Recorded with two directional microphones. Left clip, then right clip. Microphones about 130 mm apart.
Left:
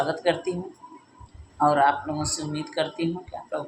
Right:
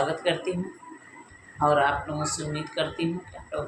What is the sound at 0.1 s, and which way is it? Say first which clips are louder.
Speech: left 2 dB; 40° left (ahead or behind).